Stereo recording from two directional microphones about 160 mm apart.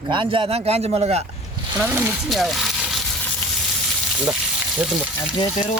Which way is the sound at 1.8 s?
15° right (ahead or behind).